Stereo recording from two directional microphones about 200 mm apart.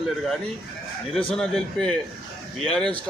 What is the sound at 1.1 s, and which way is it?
Speech, 5° left (ahead or behind).